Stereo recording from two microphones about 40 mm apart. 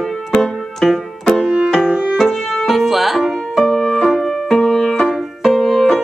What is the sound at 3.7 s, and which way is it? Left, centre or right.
Music, centre.